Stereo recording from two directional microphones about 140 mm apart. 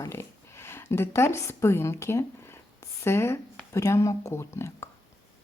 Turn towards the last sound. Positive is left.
turn(degrees=20)  # may be behind; listen again after turning